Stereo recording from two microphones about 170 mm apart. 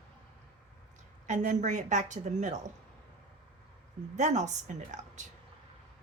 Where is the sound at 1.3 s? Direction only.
45° right (ahead or behind).